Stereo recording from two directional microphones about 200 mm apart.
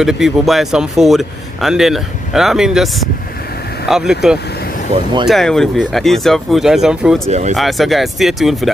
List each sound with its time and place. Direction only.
0.0 s speech: centre (ahead or behind)
7.2 s speech: 35° right (ahead or behind)
7.5 s speech: centre (ahead or behind)